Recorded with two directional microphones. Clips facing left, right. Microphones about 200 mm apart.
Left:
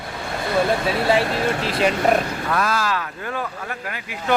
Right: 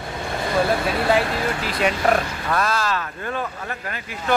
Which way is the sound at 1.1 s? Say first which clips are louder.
Left 1 dB; 30° left (ahead or behind).